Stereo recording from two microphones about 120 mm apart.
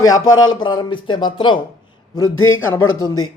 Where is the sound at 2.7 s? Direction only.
30° left (ahead or behind).